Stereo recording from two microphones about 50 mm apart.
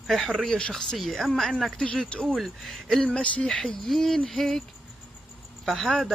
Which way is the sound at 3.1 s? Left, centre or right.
Centre.